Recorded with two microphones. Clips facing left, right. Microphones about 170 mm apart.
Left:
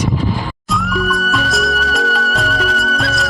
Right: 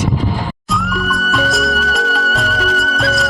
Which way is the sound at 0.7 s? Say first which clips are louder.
Left 2 dB; centre (ahead or behind).